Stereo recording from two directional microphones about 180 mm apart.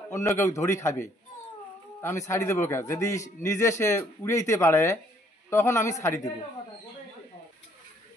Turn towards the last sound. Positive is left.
turn(degrees=15)  # may be behind; listen again after turning